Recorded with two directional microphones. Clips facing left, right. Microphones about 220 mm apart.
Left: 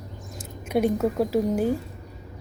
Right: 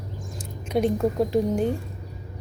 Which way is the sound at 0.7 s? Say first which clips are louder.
Even; 5° left (ahead or behind).